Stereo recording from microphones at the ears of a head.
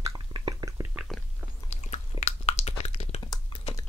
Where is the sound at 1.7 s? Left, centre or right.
Left.